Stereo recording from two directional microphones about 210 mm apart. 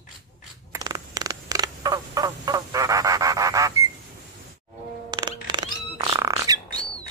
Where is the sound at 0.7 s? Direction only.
20° right (ahead or behind).